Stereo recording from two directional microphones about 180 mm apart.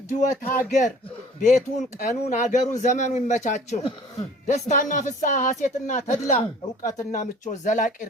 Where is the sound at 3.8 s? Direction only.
30° left (ahead or behind).